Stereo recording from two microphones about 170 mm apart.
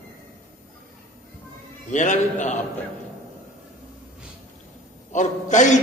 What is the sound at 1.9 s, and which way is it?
Speech, 45° left (ahead or behind).